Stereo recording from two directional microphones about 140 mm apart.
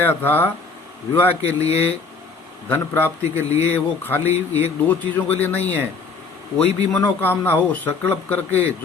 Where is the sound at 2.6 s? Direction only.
15° left (ahead or behind).